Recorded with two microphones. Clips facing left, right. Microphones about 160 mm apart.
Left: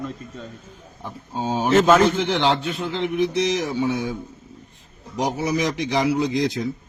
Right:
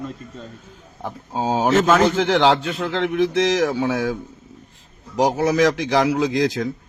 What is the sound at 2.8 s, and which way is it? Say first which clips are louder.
Speech: right 2 dB; 90° right.